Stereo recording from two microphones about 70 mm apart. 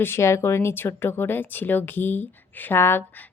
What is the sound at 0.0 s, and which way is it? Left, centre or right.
Speech, left.